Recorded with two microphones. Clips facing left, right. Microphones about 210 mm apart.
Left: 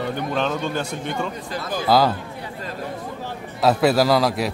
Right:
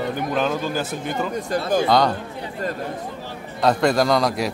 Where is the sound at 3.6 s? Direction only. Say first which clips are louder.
Left 1 dB; 5° left (ahead or behind).